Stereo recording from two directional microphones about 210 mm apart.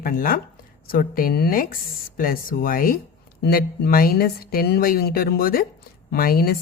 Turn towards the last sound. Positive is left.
turn(degrees=45)  # may be behind; listen again after turning